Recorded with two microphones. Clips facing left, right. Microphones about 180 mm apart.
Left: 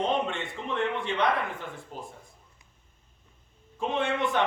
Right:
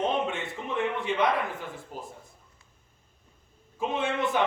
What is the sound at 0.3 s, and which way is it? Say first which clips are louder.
A man's voice: even; 5° right (ahead or behind).